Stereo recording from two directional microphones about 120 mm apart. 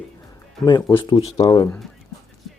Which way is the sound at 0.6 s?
40° left (ahead or behind).